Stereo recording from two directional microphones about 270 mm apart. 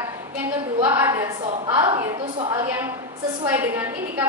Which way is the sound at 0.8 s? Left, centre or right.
Centre.